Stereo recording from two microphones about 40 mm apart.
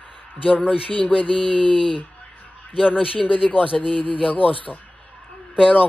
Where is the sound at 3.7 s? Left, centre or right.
Left.